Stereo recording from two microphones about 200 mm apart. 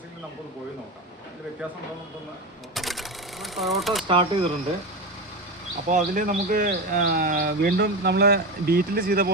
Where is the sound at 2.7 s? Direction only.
Centre (ahead or behind).